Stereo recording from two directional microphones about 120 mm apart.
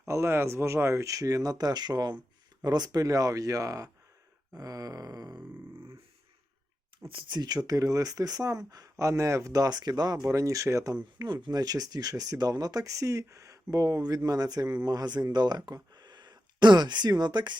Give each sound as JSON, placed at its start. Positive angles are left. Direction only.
{"t": 0.0, "sound": "speech", "side_deg": -25}
{"t": 7.1, "sound": "speech", "side_deg": -40}